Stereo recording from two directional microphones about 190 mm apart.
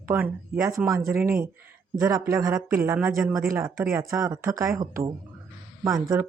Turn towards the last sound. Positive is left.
turn(degrees=-15)  # may be behind; listen again after turning